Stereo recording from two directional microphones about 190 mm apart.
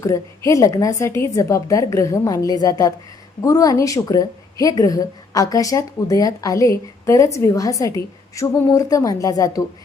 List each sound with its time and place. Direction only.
0.0 s a woman's voice: 15° left (ahead or behind)